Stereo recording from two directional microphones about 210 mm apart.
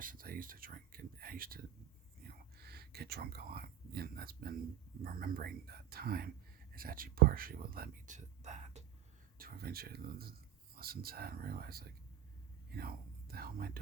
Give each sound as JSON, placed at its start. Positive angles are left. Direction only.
{"t": 0.0, "sound": "speech", "side_deg": -40}
{"t": 9.4, "sound": "speech", "side_deg": -45}